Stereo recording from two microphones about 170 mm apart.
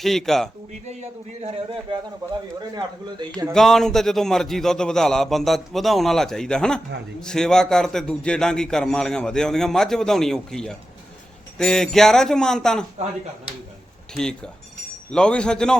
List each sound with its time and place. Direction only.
0.0 s speech: centre (ahead or behind)
1.5 s a man's voice: 35° right (ahead or behind)
2.7 s speech: 25° right (ahead or behind)
3.5 s speech: centre (ahead or behind)
14.1 s speech: 5° left (ahead or behind)